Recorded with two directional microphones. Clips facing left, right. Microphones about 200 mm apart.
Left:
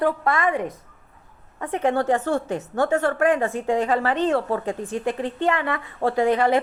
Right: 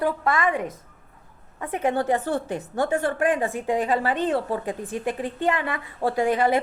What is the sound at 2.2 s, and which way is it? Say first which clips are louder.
A woman's voice: left 2 dB; 10° right (ahead or behind).